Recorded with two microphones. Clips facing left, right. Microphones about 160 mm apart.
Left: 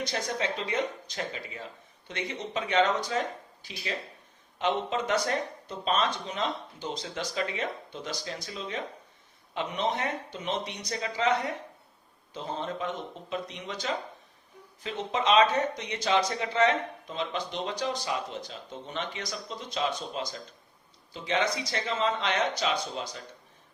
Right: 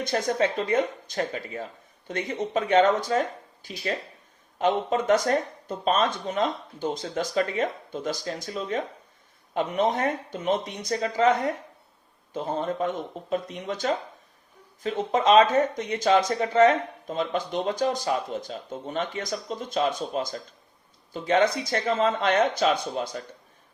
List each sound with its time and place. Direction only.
0.0 s speech: 50° right (ahead or behind)